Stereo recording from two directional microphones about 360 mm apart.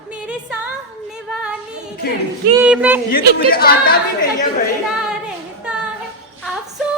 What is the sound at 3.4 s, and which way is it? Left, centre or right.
Speech, left.